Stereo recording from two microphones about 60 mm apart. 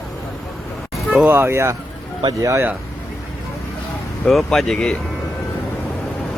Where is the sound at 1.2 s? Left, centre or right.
Right.